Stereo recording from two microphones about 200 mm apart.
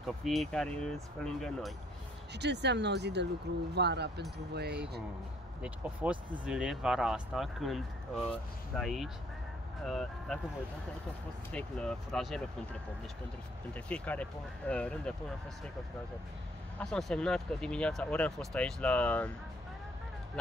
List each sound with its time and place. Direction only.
0.0 s speech: centre (ahead or behind)
2.3 s speech: 60° right (ahead or behind)
5.6 s speech: 5° right (ahead or behind)
11.5 s speech: 5° left (ahead or behind)
13.7 s speech: 5° left (ahead or behind)
16.8 s speech: 5° left (ahead or behind)